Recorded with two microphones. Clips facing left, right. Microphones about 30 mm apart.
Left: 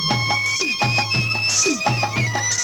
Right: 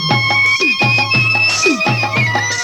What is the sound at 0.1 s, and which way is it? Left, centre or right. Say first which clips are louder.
Music: right 9 dB; right.